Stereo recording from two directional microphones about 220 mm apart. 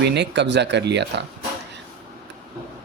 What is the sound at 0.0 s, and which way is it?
Speech, 50° right (ahead or behind).